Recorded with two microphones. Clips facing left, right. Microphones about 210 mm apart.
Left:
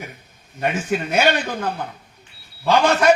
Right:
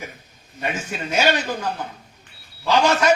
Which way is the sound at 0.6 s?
55° left (ahead or behind).